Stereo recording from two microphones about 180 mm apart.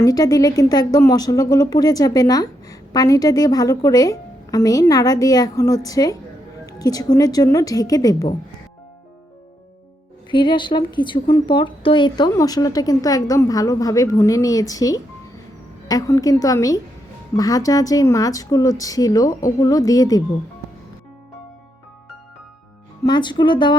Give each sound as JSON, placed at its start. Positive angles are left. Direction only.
{"t": 0.0, "sound": "speech", "side_deg": 20}
{"t": 10.3, "sound": "speech", "side_deg": 25}
{"t": 23.0, "sound": "speech", "side_deg": 25}